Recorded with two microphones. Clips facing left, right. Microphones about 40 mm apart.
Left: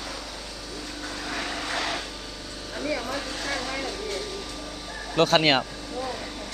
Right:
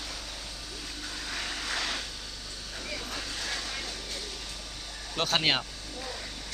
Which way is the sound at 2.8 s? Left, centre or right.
Left.